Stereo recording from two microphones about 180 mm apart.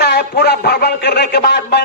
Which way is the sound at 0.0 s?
65° left (ahead or behind).